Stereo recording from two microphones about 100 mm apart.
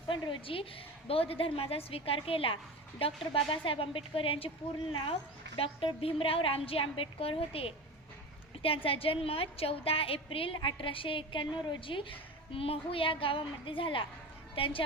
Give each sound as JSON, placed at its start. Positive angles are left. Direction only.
{"t": 0.1, "sound": "a woman's voice", "side_deg": 60}